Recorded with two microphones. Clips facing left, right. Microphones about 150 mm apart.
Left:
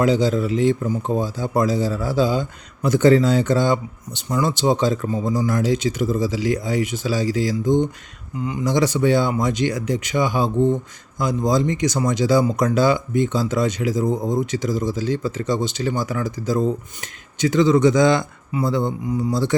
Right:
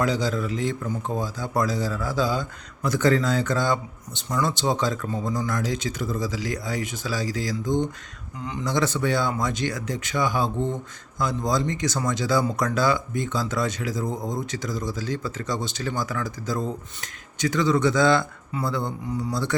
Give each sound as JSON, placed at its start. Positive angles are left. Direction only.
{"t": 0.0, "sound": "speech", "side_deg": 20}
{"t": 8.4, "sound": "speech", "side_deg": 5}
{"t": 8.6, "sound": "speech", "side_deg": 15}